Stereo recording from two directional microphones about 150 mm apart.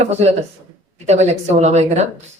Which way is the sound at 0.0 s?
45° right (ahead or behind).